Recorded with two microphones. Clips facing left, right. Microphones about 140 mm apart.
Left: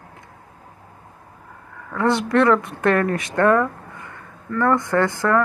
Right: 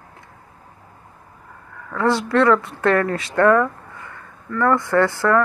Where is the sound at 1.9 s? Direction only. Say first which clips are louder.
Even; 20° left (ahead or behind).